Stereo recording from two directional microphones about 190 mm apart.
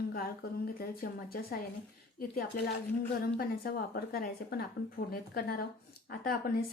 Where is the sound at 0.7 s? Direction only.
50° left (ahead or behind).